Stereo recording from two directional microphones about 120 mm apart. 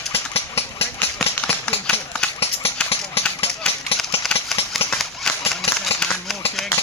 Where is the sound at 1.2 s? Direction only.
15° left (ahead or behind).